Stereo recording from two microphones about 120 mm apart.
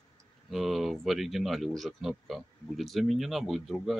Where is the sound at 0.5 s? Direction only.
Centre (ahead or behind).